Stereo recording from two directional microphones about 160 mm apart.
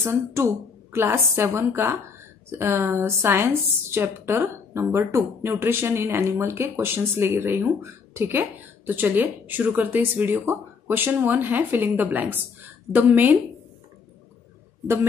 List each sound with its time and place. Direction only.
0.0 s speech: 15° right (ahead or behind)